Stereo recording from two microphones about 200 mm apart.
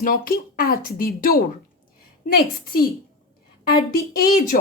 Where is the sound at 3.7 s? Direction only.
45° left (ahead or behind).